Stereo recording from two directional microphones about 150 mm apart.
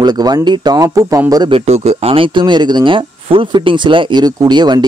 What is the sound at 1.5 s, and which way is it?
Speech, 45° right (ahead or behind).